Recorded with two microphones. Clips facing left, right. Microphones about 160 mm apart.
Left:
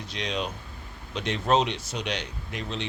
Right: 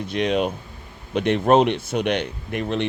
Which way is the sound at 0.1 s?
55° right (ahead or behind).